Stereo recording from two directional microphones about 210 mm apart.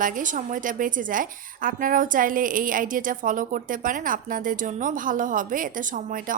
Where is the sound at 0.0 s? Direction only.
40° right (ahead or behind).